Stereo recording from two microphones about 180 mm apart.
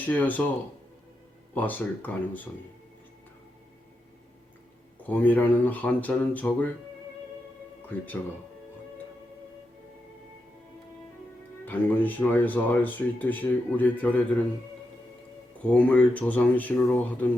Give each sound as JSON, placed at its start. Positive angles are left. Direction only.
{"t": 0.0, "sound": "speech", "side_deg": 10}
{"t": 1.5, "sound": "speech", "side_deg": 10}
{"t": 5.0, "sound": "speech", "side_deg": 10}
{"t": 11.6, "sound": "speech", "side_deg": 10}
{"t": 15.6, "sound": "speech", "side_deg": 10}